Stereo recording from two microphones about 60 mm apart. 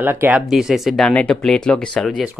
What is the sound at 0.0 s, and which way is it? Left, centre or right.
Speech, right.